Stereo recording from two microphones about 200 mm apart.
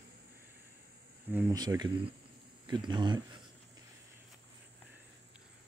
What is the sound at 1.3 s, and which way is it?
Speech, 15° right (ahead or behind).